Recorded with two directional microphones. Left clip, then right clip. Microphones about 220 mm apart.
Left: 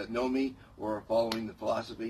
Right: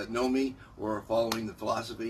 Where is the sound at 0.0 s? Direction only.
10° right (ahead or behind).